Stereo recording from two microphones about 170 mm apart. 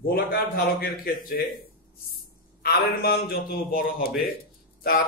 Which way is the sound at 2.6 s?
65° left (ahead or behind).